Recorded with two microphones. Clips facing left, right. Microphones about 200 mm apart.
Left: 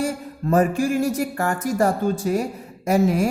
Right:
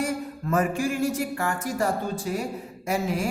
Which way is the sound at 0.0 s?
35° left (ahead or behind).